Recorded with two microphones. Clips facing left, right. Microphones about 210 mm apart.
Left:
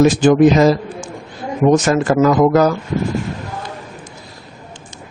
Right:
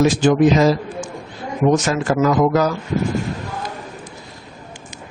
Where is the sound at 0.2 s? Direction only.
55° left (ahead or behind).